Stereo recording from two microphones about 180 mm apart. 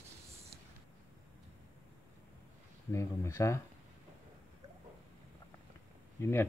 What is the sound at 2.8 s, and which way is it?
Speech, 15° left (ahead or behind).